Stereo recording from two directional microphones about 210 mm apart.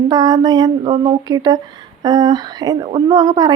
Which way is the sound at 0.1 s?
20° right (ahead or behind).